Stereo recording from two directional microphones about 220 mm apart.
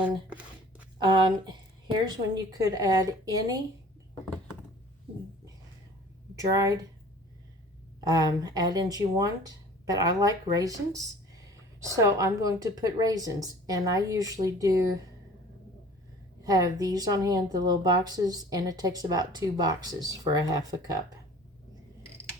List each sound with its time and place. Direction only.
1.0 s speech: 20° right (ahead or behind)
6.3 s speech: 15° right (ahead or behind)
8.0 s speech: 15° right (ahead or behind)
16.4 s speech: 15° right (ahead or behind)